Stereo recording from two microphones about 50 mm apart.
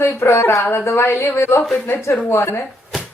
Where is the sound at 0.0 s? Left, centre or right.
Left.